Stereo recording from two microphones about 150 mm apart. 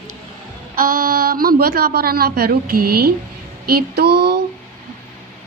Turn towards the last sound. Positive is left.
turn(degrees=-90)